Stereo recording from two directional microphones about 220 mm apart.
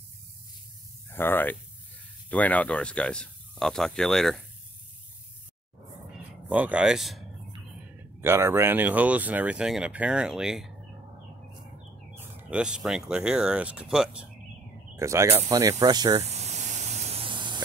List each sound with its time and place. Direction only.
1.1 s speech: 10° left (ahead or behind)
6.5 s speech: 5° right (ahead or behind)
8.2 s speech: 10° right (ahead or behind)
12.1 s speech: 10° right (ahead or behind)
16.2 s spray: 30° right (ahead or behind)